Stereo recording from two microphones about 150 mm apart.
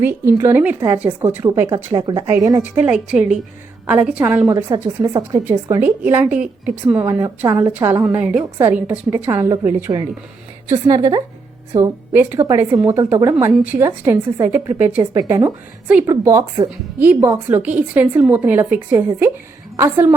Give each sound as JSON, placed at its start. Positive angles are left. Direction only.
{"t": 0.0, "sound": "a woman's voice", "side_deg": -15}
{"t": 1.7, "sound": "a woman's voice", "side_deg": -30}
{"t": 5.8, "sound": "a woman's voice", "side_deg": -10}